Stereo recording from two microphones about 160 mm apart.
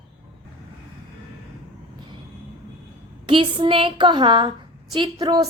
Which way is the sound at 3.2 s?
30° right (ahead or behind).